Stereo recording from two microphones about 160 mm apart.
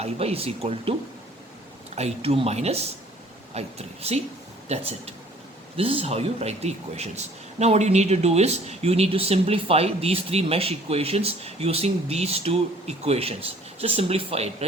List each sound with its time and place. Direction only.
0.0 s speech: 40° right (ahead or behind)
2.0 s speech: 40° right (ahead or behind)